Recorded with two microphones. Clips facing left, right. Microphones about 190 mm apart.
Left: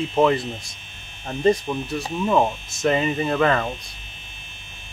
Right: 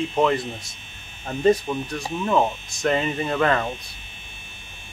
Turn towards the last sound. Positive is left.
turn(degrees=0)  # may be behind; listen again after turning